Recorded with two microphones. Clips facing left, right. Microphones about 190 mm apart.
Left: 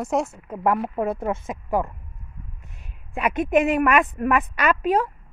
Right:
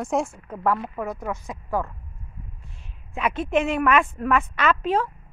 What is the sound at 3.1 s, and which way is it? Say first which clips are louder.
A woman's voice: left 3 dB; 10° left (ahead or behind).